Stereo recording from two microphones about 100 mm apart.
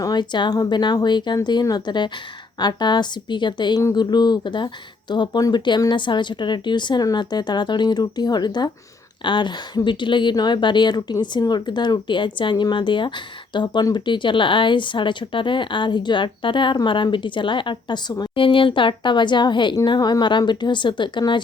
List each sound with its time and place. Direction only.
0.0 s speech: 45° left (ahead or behind)